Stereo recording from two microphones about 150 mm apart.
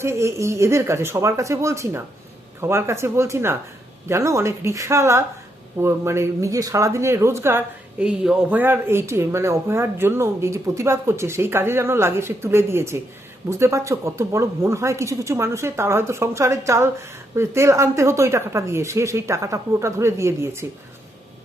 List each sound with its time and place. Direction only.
0.0 s speech: 20° right (ahead or behind)